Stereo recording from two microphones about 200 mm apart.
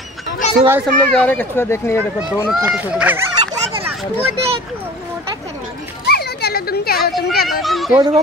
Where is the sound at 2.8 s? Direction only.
5° right (ahead or behind).